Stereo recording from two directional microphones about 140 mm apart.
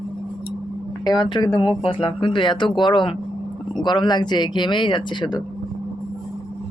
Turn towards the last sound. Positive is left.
turn(degrees=30)  # may be behind; listen again after turning